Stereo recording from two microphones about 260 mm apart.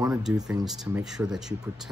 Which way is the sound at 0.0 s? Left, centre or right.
Centre.